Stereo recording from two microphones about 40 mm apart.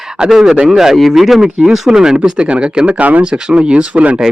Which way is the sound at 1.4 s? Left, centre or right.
Centre.